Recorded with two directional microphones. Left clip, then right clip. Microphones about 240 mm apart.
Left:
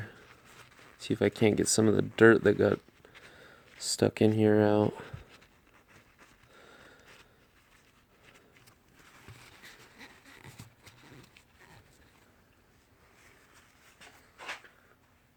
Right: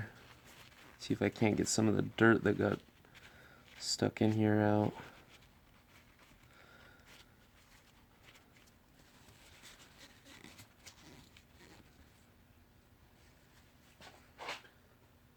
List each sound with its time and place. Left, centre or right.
0.0 s a sound: left
3.8 s speech: left
4.8 s writing: centre
6.7 s a sound: left
9.6 s pant: centre
10.8 s horse: centre